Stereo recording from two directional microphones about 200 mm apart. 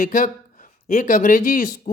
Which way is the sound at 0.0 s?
40° left (ahead or behind).